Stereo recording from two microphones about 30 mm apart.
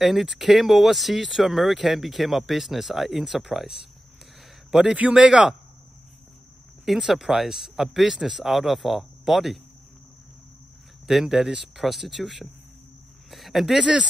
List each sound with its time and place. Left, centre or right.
0.0 s speech: centre
4.6 s a man's voice: centre
5.2 s a man's voice: right
7.0 s speech: centre
11.2 s speech: centre
11.8 s speech: centre